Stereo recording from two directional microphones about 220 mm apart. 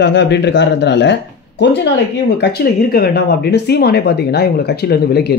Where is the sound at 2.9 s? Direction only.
45° left (ahead or behind).